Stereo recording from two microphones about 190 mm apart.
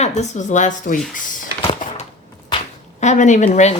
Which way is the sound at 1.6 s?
30° left (ahead or behind).